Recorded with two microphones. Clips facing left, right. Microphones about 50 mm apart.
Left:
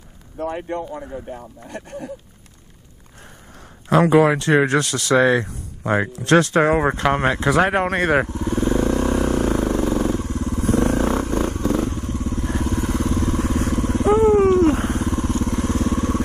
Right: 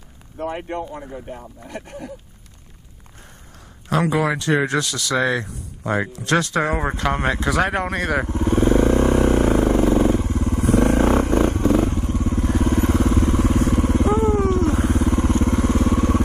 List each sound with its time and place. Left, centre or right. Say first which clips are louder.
4.1 s speech: left 5 dB; left
6.8 s speech: left 4 dB; left
7.2 s speech: left 2 dB; left
7.4 s speech: left 5 dB; left
8.3 s vehicle: right 3 dB; right
9.8 s motorcycle: right 3 dB; right
11.7 s vehicle: right 3 dB; right
12.6 s vehicle: right 4 dB; right
13.2 s vehicle: right 2 dB; right
14.0 s vehicle: left 9 dB; left
15.0 s vehicle: right 3 dB; right